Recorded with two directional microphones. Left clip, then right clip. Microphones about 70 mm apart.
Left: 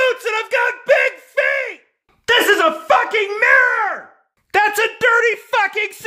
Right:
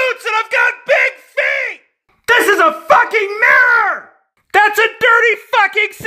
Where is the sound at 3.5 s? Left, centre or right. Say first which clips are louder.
Right 4 dB; right.